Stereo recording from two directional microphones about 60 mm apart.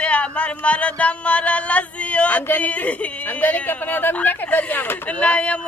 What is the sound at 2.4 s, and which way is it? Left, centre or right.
A woman's voice, left.